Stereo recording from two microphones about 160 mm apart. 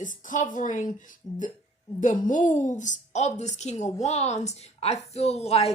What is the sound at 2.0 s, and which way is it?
A woman's voice, 55° left (ahead or behind).